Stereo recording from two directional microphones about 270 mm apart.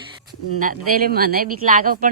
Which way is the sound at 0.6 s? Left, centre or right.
Right.